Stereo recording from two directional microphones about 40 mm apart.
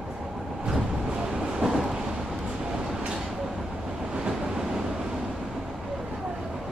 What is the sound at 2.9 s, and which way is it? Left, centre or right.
Vehicle, right.